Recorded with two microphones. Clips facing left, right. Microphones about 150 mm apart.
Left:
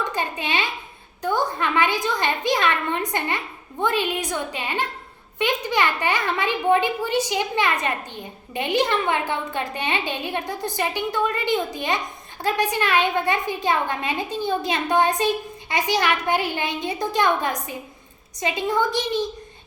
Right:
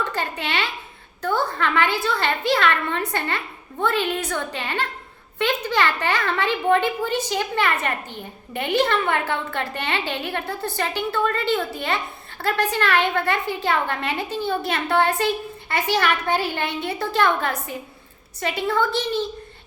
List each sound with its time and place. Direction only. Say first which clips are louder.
0.0 s a woman's voice: even; 15° left (ahead or behind)